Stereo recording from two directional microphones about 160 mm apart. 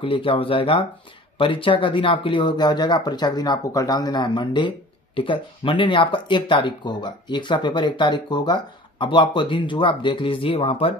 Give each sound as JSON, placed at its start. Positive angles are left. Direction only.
{"t": 0.0, "sound": "speech", "side_deg": 35}